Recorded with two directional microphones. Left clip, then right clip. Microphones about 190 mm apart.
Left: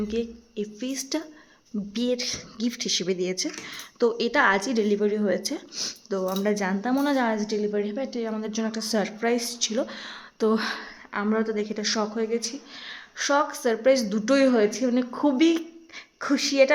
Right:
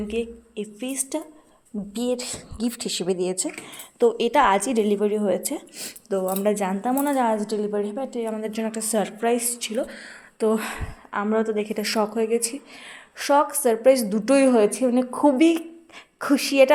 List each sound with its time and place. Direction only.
0.1 s a woman's voice: 5° left (ahead or behind)
9.8 s a woman's voice: 15° left (ahead or behind)
11.7 s speech: 10° right (ahead or behind)